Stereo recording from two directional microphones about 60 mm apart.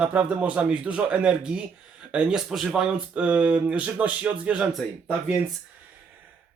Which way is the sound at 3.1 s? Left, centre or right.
Right.